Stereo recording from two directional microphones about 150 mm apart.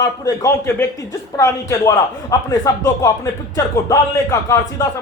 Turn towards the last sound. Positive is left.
turn(degrees=20)  # may be behind; listen again after turning